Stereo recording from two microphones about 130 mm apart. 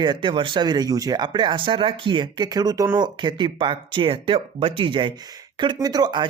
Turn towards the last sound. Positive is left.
turn(degrees=-35)  # may be behind; listen again after turning